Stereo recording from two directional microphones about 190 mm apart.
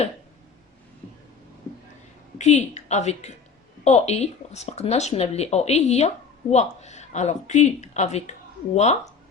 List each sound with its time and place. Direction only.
2.4 s speech: 35° left (ahead or behind)